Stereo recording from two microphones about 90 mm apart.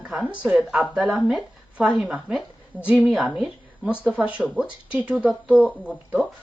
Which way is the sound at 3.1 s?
Centre (ahead or behind).